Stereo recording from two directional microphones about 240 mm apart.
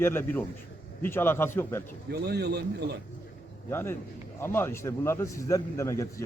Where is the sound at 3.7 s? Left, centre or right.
Centre.